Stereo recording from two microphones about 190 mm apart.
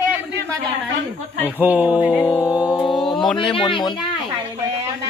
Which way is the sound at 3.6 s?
25° left (ahead or behind).